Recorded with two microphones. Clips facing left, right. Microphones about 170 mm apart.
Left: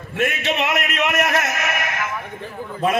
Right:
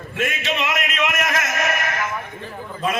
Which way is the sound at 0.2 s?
55° left (ahead or behind).